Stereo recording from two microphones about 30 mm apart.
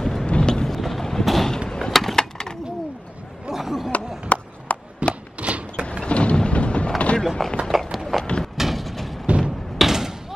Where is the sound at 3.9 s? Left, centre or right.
Left.